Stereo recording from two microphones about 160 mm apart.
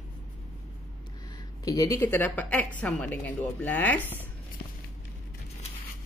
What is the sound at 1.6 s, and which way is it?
Speech, 20° left (ahead or behind).